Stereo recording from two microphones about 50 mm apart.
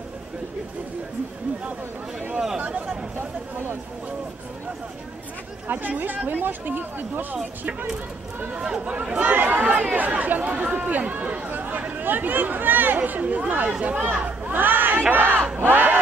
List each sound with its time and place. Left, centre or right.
5.7 s speech: right
8.5 s speech: centre
9.2 s speech: right
15.6 s battle cry: right